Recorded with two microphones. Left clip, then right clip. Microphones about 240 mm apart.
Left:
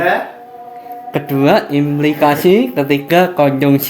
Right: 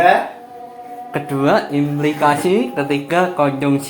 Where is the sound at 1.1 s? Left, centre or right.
Left.